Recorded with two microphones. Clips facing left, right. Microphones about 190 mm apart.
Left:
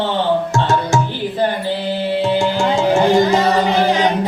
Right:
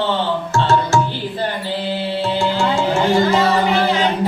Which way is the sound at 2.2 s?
15° left (ahead or behind).